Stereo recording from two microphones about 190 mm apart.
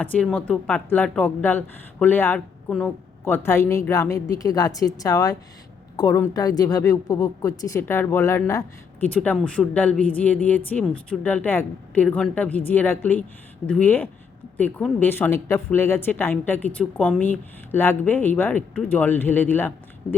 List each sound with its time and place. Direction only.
0.0 s speech: 5° left (ahead or behind)